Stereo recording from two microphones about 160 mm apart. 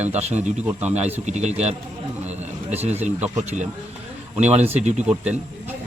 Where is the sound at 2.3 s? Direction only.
45° right (ahead or behind).